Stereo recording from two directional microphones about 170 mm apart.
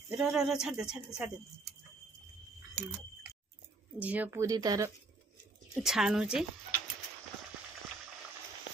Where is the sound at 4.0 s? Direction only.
10° right (ahead or behind).